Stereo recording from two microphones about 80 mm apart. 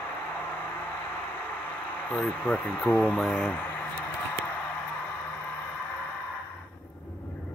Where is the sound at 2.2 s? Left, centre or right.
Left.